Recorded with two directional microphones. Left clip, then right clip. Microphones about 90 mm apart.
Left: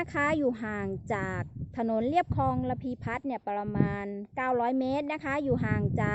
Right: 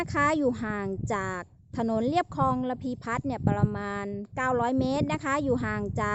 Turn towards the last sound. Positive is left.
turn(degrees=-45)  # may be behind; listen again after turning